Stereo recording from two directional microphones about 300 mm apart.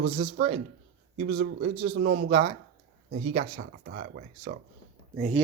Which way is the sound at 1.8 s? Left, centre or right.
Right.